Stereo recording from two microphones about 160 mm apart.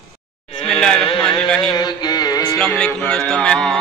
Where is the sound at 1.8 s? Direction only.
25° left (ahead or behind).